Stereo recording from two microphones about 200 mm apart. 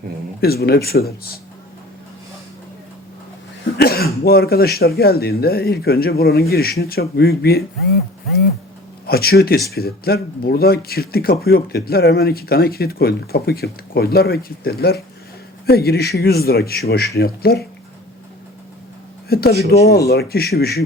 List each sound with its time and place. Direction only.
0.4 s speech: 50° left (ahead or behind)
3.8 s speech: 50° left (ahead or behind)
9.0 s speech: 50° left (ahead or behind)
19.3 s speech: 50° left (ahead or behind)